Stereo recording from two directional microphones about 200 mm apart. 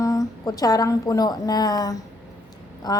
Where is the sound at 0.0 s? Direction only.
15° left (ahead or behind).